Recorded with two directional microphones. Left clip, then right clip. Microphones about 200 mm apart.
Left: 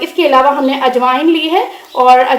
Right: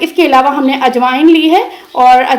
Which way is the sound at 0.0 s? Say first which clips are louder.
Right 1 dB; 35° right (ahead or behind).